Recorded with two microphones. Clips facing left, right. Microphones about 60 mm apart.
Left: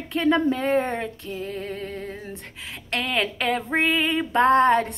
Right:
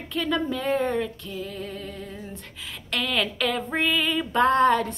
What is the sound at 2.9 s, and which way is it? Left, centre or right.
Female singing, left.